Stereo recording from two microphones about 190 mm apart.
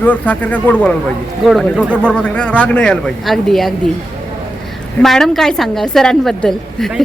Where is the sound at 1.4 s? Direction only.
5° right (ahead or behind).